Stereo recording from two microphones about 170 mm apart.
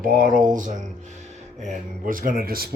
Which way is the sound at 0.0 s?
55° right (ahead or behind).